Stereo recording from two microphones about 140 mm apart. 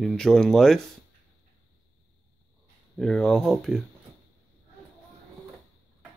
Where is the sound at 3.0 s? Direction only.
5° left (ahead or behind).